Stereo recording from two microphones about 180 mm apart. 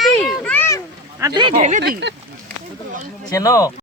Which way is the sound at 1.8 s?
70° right (ahead or behind).